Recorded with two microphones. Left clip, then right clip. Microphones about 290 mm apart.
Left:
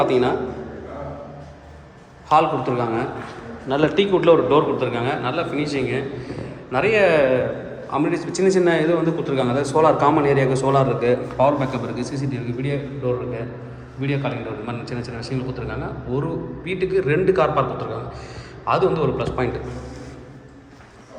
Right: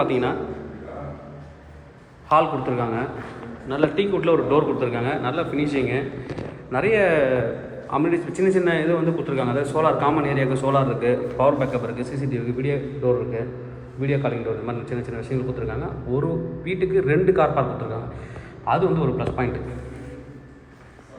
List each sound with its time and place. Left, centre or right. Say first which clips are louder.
0.0 s speech: left 4 dB; centre
2.3 s speech: left 2 dB; centre
3.7 s a man's voice: left 3 dB; centre